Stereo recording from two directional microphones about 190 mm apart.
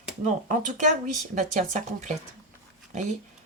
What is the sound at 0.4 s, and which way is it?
A woman's voice, 40° right (ahead or behind).